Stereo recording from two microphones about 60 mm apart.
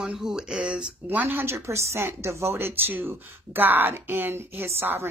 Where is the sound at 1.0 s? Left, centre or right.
Right.